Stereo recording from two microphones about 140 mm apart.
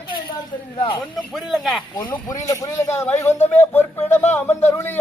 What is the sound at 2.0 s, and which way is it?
Speech, 30° left (ahead or behind).